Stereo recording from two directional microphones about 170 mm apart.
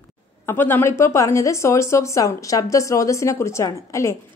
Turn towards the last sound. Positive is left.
turn(degrees=20)  # may be behind; listen again after turning